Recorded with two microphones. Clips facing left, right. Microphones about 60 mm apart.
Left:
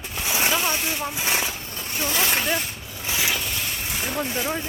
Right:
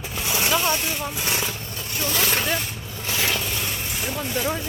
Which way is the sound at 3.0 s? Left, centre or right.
Centre.